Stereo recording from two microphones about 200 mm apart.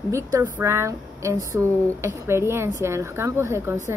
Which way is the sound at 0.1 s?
15° right (ahead or behind).